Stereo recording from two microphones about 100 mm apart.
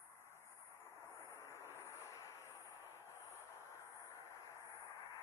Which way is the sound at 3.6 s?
25° right (ahead or behind).